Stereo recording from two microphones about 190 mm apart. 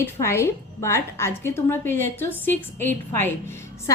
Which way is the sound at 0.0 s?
15° left (ahead or behind).